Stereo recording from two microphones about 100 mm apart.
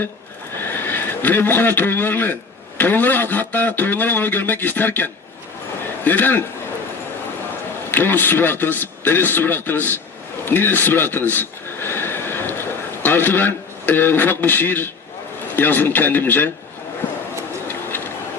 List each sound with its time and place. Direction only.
0.5 s a man's voice: 20° left (ahead or behind)
7.9 s a man's voice: 20° left (ahead or behind)
10.4 s a sound: 20° left (ahead or behind)
15.5 s a man's voice: 20° left (ahead or behind)